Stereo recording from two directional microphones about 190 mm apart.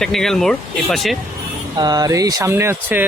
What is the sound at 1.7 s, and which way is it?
Speech, 20° right (ahead or behind).